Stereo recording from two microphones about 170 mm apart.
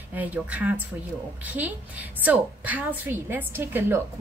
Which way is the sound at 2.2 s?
10° right (ahead or behind).